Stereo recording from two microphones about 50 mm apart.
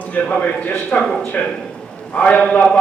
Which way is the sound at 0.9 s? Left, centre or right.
Left.